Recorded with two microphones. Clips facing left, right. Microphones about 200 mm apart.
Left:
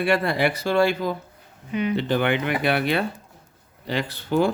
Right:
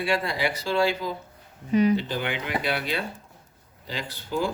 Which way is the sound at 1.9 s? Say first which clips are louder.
Left 6 dB; 65° left (ahead or behind).